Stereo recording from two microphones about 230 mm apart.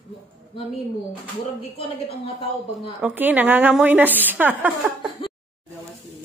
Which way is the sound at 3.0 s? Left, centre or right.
Centre.